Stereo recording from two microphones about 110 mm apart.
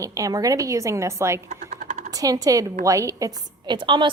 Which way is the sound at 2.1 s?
35° right (ahead or behind).